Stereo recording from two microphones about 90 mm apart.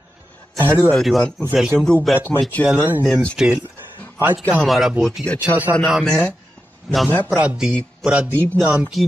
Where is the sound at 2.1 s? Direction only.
25° left (ahead or behind).